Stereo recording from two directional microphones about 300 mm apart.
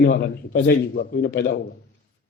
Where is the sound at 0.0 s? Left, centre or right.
Left.